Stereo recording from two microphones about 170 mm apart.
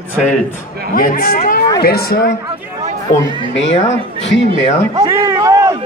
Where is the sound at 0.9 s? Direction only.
55° left (ahead or behind).